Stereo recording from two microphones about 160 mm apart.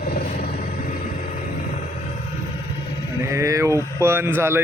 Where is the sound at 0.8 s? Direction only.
70° left (ahead or behind).